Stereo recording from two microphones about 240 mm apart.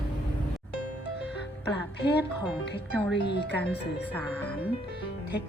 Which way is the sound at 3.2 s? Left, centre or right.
Left.